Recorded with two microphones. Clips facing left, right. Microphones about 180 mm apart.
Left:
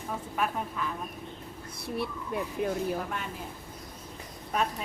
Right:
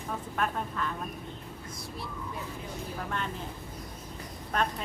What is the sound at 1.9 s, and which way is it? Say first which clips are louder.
Speech: left 8 dB; 65° left (ahead or behind).